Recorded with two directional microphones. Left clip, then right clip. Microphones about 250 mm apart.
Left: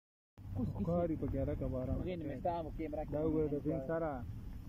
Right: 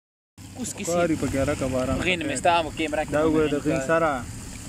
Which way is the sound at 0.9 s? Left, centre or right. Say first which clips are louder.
Right 14 dB; right.